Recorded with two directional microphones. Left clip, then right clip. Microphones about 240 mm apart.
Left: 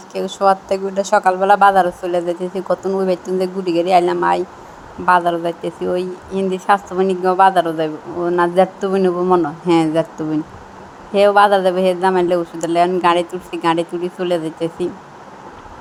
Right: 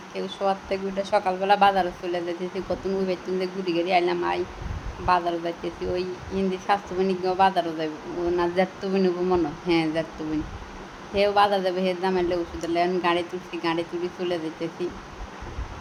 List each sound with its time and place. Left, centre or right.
0.1 s speech: left
11.1 s speech: centre